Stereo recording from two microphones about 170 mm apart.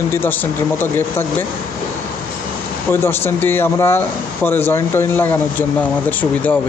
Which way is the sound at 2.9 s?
15° left (ahead or behind).